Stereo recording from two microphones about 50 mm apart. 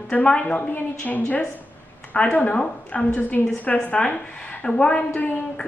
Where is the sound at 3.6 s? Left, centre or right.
Left.